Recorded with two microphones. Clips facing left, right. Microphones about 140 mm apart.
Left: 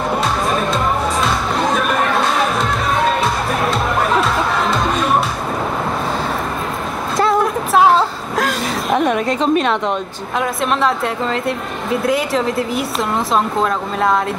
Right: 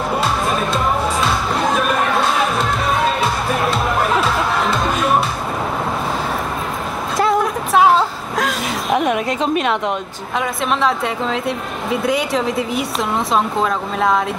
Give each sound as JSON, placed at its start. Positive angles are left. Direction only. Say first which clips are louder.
{"t": 1.2, "sound": "music", "louder": "left 1 dB", "side_deg": 0}
{"t": 3.7, "sound": "music", "louder": "left 1 dB", "side_deg": 0}
{"t": 7.7, "sound": "a sound", "louder": "even", "side_deg": 0}
{"t": 9.1, "sound": "a woman's voice", "louder": "left 3 dB", "side_deg": 35}
{"t": 10.8, "sound": "speech", "louder": "left 1 dB", "side_deg": 0}